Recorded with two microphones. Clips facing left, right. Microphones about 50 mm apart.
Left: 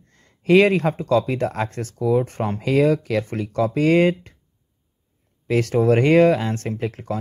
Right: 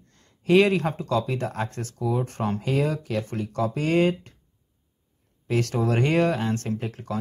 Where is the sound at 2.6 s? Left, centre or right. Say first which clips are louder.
Left 10 dB; left.